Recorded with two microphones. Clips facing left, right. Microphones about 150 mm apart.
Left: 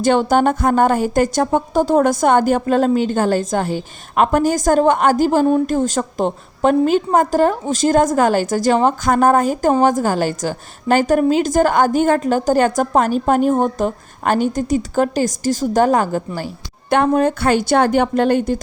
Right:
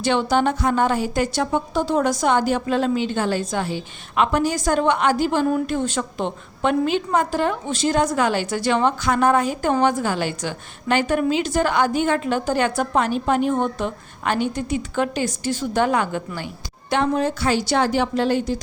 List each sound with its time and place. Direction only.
0.0 s a woman's voice: 45° left (ahead or behind)
16.9 s a woman's voice: 50° left (ahead or behind)